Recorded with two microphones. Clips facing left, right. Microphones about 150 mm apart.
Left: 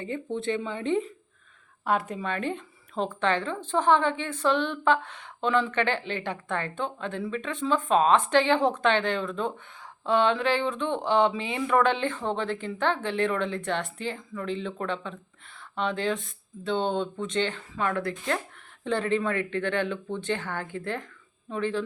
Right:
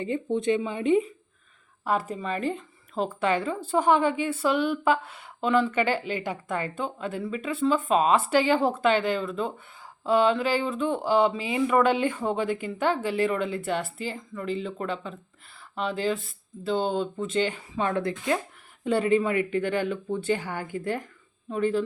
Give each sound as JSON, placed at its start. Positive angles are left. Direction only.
{"t": 0.0, "sound": "a woman's voice", "side_deg": -15}
{"t": 1.8, "sound": "a woman's voice", "side_deg": -5}
{"t": 17.7, "sound": "speech", "side_deg": -20}
{"t": 18.9, "sound": "a woman's voice", "side_deg": -10}